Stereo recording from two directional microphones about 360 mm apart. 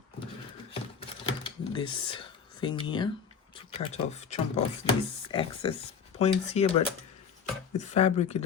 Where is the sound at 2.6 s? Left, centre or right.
Centre.